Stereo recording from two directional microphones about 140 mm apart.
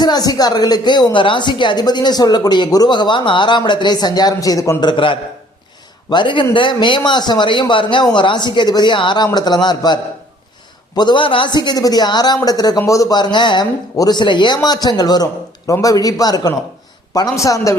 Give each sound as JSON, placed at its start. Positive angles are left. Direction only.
{"t": 0.0, "sound": "speech", "side_deg": 30}